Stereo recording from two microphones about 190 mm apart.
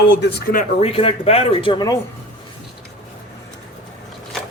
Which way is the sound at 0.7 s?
30° left (ahead or behind).